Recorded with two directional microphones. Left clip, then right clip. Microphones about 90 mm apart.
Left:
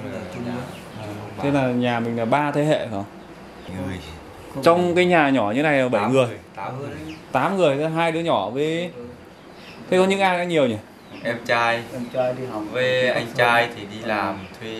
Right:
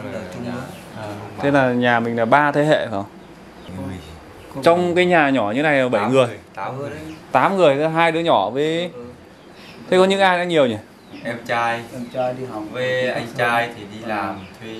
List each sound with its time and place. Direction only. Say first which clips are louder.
0.0 s a sound: right 2 dB; 20° right (ahead or behind)
4.6 s a man's voice: right 1 dB; centre (ahead or behind)
11.2 s speech: left 1 dB; 15° left (ahead or behind)